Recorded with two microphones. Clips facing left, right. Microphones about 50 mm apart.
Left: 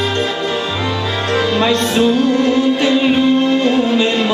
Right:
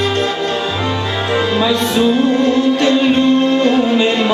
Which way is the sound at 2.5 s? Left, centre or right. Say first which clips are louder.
Right 1 dB; centre.